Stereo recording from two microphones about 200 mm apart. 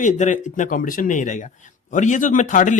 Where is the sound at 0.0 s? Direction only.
40° left (ahead or behind).